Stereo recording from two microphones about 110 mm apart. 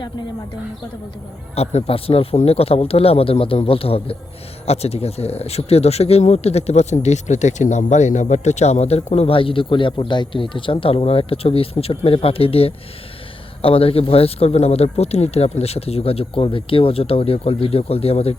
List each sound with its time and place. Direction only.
1.5 s speech: 65° left (ahead or behind)